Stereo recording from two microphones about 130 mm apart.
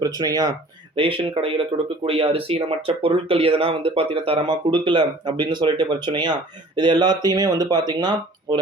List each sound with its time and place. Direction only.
0.0 s speech: 30° right (ahead or behind)
0.9 s speech: 40° right (ahead or behind)